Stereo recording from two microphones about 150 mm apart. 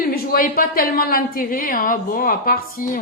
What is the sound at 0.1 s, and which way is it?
A woman's voice, 75° left (ahead or behind).